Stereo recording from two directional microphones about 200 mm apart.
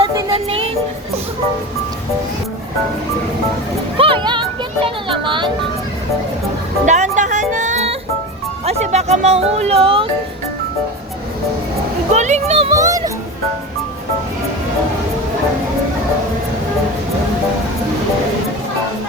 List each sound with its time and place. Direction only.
0.0 s music: 30° right (ahead or behind)
3.9 s a child's voice: 25° right (ahead or behind)
6.8 s music: 35° right (ahead or behind)
8.6 s speech: 35° right (ahead or behind)
12.1 s speech: 35° right (ahead or behind)
12.7 s a child's voice: 15° right (ahead or behind)